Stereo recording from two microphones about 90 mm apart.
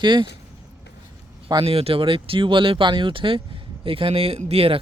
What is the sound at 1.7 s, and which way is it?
Speech, 90° right.